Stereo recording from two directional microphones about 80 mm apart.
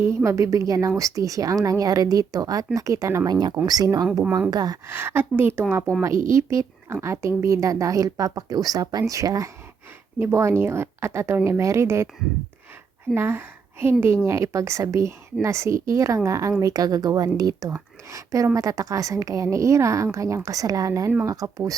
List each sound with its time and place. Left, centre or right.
0.0 s speech: right
3.2 s speech: right
4.5 s speech: right
4.9 s speech: right
6.0 s speech: right
10.2 s speech: right
13.1 s a woman's voice: right